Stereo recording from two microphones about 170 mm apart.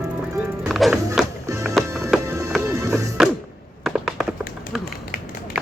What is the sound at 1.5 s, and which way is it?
Music, 15° right (ahead or behind).